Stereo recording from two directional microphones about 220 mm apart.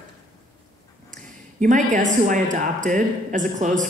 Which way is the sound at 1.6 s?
35° right (ahead or behind).